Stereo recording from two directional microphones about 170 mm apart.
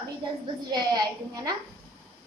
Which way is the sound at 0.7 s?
25° right (ahead or behind).